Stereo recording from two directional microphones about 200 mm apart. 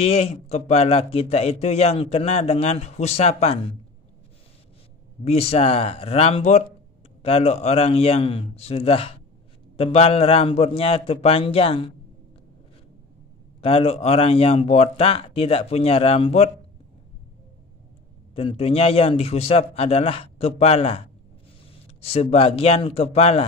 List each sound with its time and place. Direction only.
0.0 s a man's voice: 30° left (ahead or behind)
5.2 s a man's voice: 30° left (ahead or behind)
13.6 s speech: 30° left (ahead or behind)
18.3 s a man's voice: 30° left (ahead or behind)